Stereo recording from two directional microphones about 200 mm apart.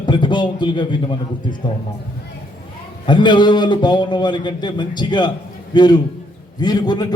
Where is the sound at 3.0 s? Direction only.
20° left (ahead or behind).